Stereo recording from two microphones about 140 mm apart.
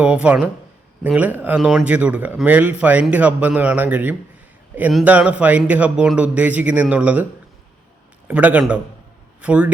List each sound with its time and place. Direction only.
0.0 s speech: 10° right (ahead or behind)
8.3 s speech: 10° right (ahead or behind)